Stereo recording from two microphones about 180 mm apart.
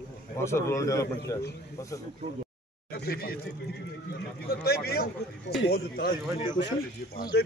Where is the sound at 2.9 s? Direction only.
60° left (ahead or behind).